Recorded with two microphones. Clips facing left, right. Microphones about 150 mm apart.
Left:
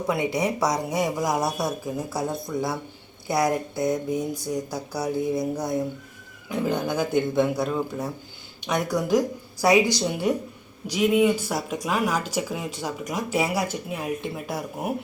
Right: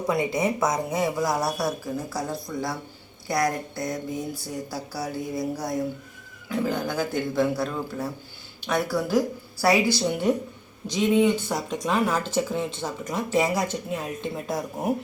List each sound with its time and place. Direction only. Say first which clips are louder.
0.6 s speech: even; 10° left (ahead or behind)